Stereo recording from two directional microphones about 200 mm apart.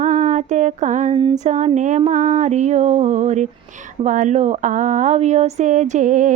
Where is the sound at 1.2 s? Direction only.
25° right (ahead or behind).